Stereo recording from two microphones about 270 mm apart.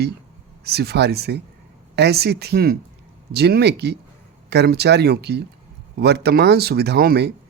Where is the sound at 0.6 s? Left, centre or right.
Right.